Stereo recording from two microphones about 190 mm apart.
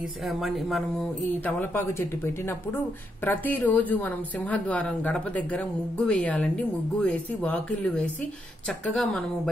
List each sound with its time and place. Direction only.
0.3 s a woman's voice: centre (ahead or behind)
3.3 s a woman's voice: 10° left (ahead or behind)